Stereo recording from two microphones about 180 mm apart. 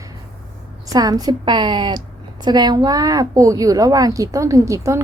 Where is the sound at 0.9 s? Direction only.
20° right (ahead or behind).